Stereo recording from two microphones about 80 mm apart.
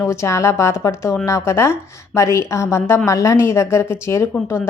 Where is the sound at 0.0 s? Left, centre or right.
Left.